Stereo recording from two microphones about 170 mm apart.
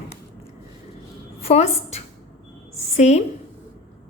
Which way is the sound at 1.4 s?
40° left (ahead or behind).